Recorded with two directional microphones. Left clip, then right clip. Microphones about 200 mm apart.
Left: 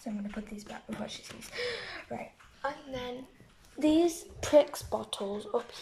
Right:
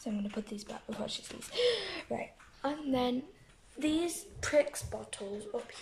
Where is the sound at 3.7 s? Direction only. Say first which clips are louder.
Left 6 dB; 5° left (ahead or behind).